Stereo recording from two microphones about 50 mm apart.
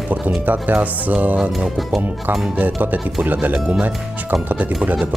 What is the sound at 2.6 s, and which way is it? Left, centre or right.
Speech, right.